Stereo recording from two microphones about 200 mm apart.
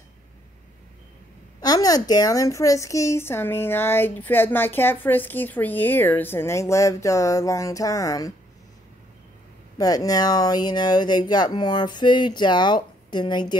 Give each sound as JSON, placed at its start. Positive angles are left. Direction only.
{"t": 1.6, "sound": "a woman's voice", "side_deg": 20}
{"t": 9.8, "sound": "speech", "side_deg": 20}